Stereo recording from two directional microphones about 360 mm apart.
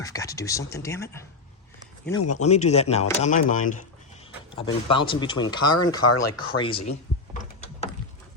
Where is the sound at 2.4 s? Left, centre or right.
Centre.